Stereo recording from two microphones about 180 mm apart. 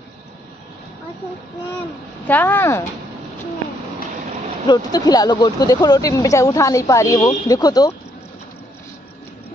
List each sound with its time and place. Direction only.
2.2 s speech: 10° left (ahead or behind)
4.6 s speech: 20° left (ahead or behind)